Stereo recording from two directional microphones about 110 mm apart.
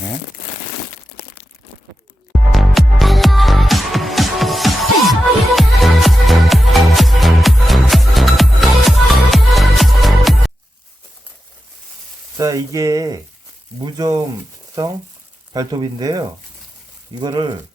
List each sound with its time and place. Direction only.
2.5 s music: centre (ahead or behind)
12.4 s speech: 30° right (ahead or behind)